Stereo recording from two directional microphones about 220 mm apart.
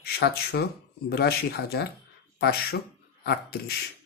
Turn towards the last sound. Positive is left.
turn(degrees=45)  # may be behind; listen again after turning